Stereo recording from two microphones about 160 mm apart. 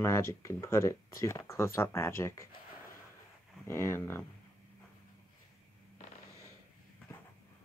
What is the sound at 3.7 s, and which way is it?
Speech, 15° left (ahead or behind).